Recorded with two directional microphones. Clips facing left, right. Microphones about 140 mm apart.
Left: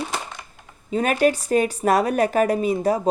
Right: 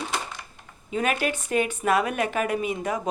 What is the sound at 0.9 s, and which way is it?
A woman's voice, 40° left (ahead or behind).